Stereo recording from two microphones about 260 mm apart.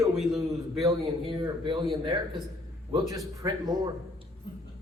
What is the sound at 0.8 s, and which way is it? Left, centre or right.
A man's voice, centre.